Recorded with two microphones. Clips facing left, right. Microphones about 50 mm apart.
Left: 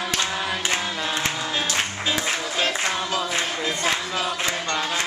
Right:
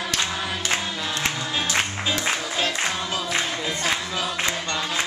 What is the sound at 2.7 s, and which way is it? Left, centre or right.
Music, centre.